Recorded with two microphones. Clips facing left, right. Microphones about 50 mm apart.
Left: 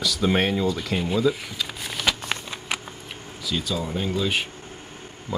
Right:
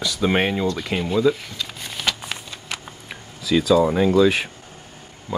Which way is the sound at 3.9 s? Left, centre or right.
Right.